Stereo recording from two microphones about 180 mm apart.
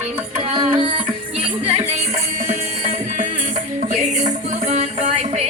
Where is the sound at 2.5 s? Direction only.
45° right (ahead or behind).